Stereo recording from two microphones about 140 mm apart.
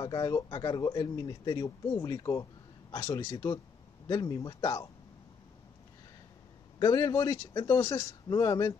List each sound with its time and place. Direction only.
0.0 s speech: 30° left (ahead or behind)
6.8 s speech: 30° left (ahead or behind)